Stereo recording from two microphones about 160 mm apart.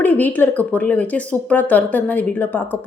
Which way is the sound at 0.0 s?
10° left (ahead or behind).